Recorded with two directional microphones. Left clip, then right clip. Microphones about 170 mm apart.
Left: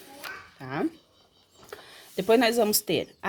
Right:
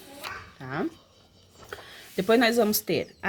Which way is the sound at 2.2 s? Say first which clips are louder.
Even; 15° left (ahead or behind).